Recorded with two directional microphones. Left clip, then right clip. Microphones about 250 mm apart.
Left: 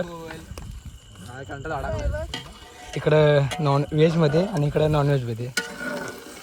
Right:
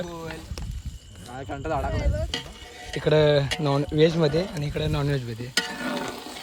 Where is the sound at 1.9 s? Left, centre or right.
Centre.